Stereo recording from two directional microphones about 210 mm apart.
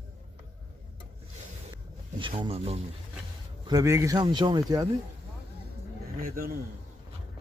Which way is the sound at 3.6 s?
15° right (ahead or behind).